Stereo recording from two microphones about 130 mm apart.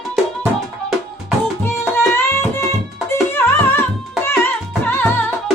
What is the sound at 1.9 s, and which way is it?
Music, 20° left (ahead or behind).